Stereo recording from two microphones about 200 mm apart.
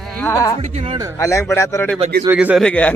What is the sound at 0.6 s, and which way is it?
Speech, 30° right (ahead or behind).